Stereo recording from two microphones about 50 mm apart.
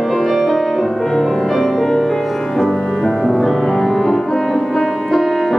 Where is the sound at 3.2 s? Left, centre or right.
Centre.